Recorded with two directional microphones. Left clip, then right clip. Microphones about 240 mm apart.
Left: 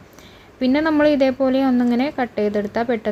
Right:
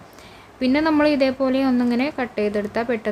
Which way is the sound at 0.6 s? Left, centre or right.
Centre.